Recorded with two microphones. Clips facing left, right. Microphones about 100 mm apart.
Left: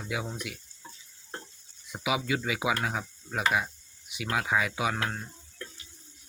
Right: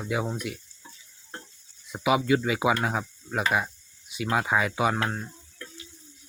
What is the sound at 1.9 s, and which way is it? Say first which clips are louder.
Speech: right 7 dB; 45° right (ahead or behind).